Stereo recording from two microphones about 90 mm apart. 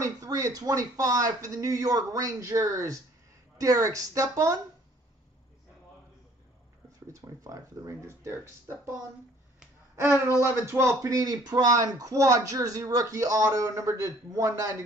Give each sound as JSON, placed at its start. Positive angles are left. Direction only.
{"t": 0.0, "sound": "a man's voice", "side_deg": -40}
{"t": 7.1, "sound": "a sound", "side_deg": -40}
{"t": 9.9, "sound": "a man's voice", "side_deg": -30}